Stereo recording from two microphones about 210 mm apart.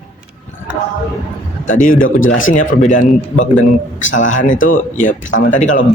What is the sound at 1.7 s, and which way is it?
Speech, 40° left (ahead or behind).